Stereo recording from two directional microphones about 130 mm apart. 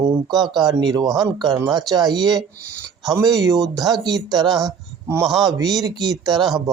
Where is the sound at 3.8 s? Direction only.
30° right (ahead or behind).